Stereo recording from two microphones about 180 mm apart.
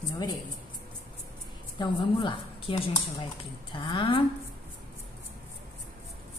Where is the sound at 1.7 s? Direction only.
25° left (ahead or behind).